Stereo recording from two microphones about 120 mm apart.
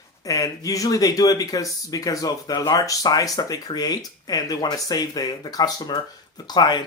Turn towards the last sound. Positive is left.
turn(degrees=35)  # may be behind; listen again after turning